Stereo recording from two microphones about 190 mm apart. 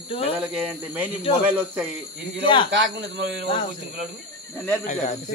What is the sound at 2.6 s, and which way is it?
Speech, 70° right (ahead or behind).